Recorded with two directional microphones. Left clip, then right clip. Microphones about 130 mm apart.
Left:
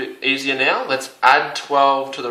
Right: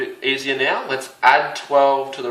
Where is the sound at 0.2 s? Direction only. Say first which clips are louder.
Left 2 dB; 30° left (ahead or behind).